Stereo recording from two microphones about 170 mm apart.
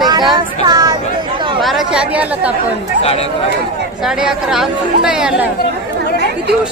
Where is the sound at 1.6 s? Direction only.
Centre (ahead or behind).